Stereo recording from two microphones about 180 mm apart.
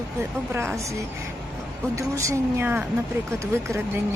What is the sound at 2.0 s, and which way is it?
Speech, 15° right (ahead or behind).